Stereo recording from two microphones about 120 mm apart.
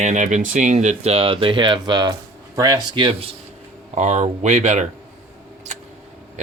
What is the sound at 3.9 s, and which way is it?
Speech, 70° right (ahead or behind).